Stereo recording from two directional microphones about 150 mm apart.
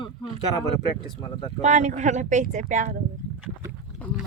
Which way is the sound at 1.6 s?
50° right (ahead or behind).